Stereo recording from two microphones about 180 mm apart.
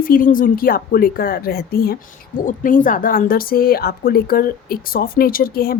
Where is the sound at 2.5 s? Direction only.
45° left (ahead or behind).